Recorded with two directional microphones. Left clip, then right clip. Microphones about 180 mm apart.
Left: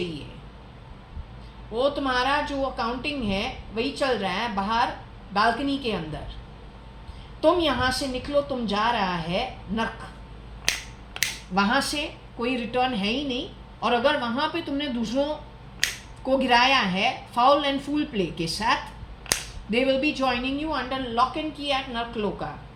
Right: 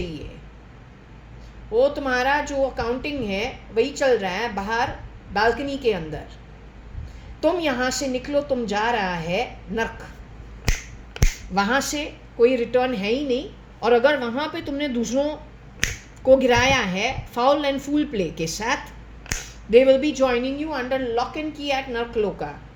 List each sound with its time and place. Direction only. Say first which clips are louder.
1.7 s a woman's voice: right 4 dB; 45° right (ahead or behind)
7.4 s a woman's voice: even; 50° right (ahead or behind)
11.5 s a woman's voice: right 2 dB; 40° right (ahead or behind)